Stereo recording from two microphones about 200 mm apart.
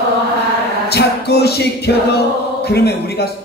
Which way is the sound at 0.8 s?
55° left (ahead or behind).